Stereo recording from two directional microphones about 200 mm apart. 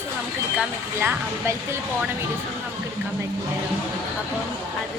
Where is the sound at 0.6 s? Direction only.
10° right (ahead or behind).